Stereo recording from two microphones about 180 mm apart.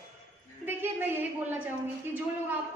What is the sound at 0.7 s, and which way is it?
Speech, 10° right (ahead or behind).